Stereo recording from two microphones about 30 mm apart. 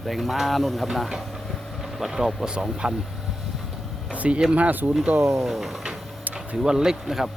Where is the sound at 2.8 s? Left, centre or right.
Right.